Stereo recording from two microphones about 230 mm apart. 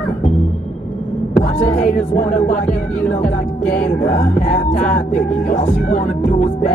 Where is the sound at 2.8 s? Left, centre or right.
Centre.